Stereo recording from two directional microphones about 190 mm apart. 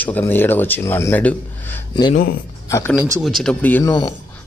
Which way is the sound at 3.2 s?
Centre (ahead or behind).